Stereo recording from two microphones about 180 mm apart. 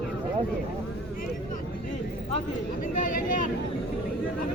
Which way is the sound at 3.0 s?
50° left (ahead or behind).